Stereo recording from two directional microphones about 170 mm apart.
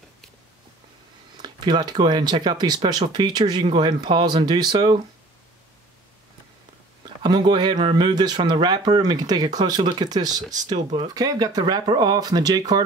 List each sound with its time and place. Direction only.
1.4 s speech: 25° right (ahead or behind)
7.2 s speech: 25° right (ahead or behind)